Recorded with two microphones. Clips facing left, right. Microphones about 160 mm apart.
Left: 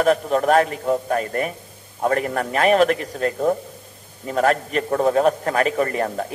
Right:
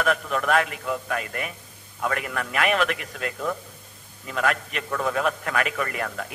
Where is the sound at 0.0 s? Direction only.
35° left (ahead or behind).